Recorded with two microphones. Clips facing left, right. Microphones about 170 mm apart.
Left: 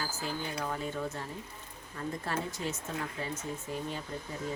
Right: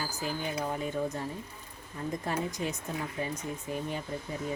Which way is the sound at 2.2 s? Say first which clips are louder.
Right 3 dB; 15° right (ahead or behind).